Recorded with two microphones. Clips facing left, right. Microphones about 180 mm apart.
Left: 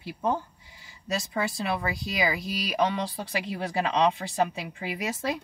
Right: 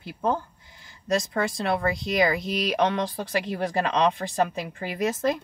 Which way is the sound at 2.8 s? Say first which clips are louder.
Right 1 dB; 65° right (ahead or behind).